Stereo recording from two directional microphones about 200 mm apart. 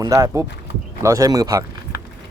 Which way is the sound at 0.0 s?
15° right (ahead or behind).